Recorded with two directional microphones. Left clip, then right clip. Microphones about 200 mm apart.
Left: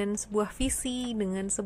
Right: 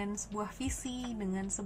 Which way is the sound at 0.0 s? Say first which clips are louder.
Left 9 dB; 50° left (ahead or behind).